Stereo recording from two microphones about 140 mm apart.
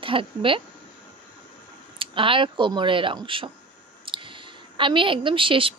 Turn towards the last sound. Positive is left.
turn(degrees=-40)  # may be behind; listen again after turning